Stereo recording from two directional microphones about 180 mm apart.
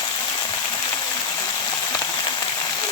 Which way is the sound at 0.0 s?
25° left (ahead or behind).